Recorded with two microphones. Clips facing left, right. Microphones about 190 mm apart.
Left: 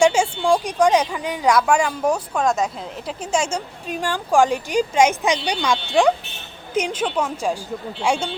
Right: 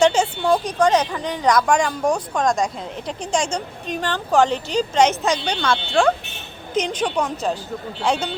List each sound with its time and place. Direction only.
0.0 s speech: 10° left (ahead or behind)